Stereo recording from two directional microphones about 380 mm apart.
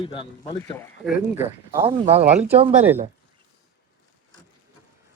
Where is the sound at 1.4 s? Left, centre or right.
Centre.